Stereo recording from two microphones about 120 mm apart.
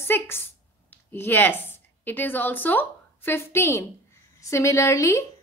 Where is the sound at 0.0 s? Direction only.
20° left (ahead or behind).